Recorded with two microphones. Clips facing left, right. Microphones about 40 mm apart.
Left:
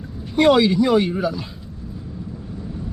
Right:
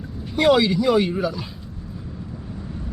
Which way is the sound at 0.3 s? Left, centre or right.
Centre.